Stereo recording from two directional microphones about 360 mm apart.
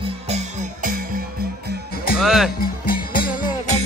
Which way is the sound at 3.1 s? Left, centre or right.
Left.